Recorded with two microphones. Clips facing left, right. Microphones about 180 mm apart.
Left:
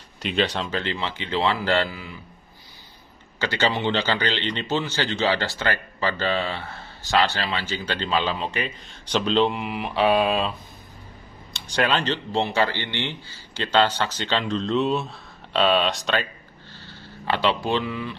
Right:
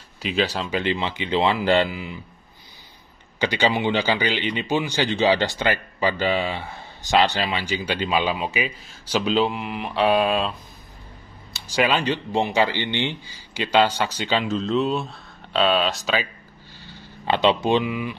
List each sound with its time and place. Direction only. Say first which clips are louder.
0.2 s speech: even; centre (ahead or behind)
0.7 s speech: right 4 dB; 15° right (ahead or behind)
3.3 s speech: right 2 dB; 15° right (ahead or behind)
16.8 s speech: right 2 dB; 15° right (ahead or behind)